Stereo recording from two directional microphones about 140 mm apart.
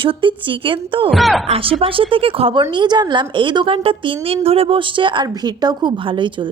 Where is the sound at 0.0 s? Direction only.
40° right (ahead or behind).